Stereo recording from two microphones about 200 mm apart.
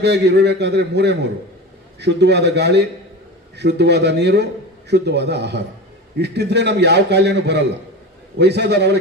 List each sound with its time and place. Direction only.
0.0 s a man's voice: 55° right (ahead or behind)